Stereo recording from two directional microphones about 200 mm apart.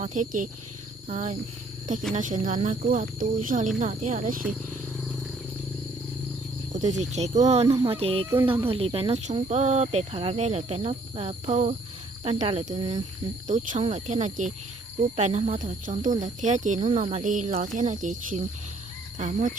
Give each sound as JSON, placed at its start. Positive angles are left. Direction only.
{"t": 0.0, "sound": "speech", "side_deg": -40}
{"t": 6.7, "sound": "speech", "side_deg": -35}